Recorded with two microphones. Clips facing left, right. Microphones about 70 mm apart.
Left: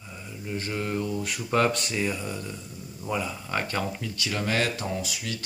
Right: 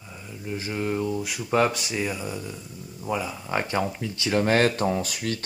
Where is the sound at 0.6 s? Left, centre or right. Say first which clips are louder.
Right 2 dB; centre.